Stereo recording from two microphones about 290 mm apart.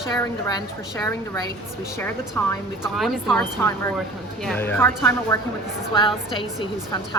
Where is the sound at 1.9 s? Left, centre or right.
Centre.